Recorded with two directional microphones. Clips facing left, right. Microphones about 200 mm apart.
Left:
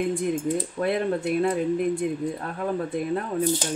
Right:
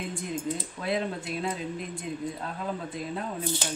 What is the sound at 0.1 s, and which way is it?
Speech, 55° left (ahead or behind).